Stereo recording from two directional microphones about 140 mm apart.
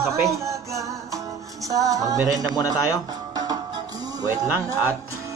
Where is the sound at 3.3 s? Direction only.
30° right (ahead or behind).